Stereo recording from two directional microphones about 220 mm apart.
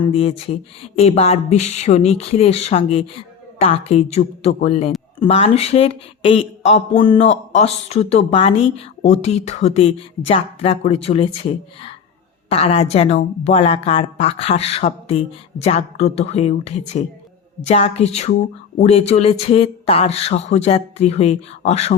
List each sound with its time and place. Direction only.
0.0 s speech: 25° left (ahead or behind)
12.5 s speech: 25° left (ahead or behind)